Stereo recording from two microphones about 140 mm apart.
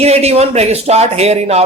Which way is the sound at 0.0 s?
50° right (ahead or behind).